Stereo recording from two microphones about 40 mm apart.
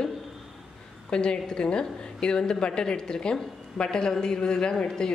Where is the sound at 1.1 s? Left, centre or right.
Left.